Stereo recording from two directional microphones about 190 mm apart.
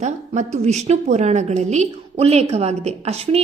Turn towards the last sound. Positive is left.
turn(degrees=-35)  # may be behind; listen again after turning